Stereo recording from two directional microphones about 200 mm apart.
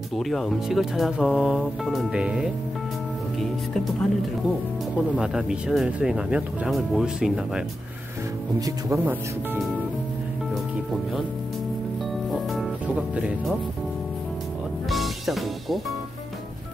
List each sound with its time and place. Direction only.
0.1 s speech: centre (ahead or behind)
5.2 s speech: 5° right (ahead or behind)
8.5 s speech: 15° right (ahead or behind)
12.3 s music: 5° right (ahead or behind)
14.9 s music: centre (ahead or behind)